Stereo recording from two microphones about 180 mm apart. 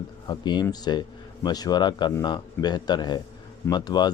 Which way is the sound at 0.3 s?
25° left (ahead or behind).